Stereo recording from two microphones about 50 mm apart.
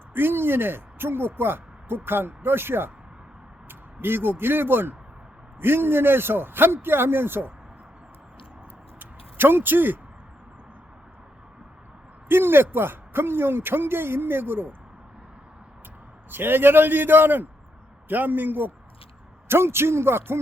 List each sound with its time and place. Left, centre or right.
0.1 s speech: right
9.0 s a sound: right
12.3 s a sound: right
12.7 s speech: right
16.3 s a man's voice: right
19.5 s a man's voice: right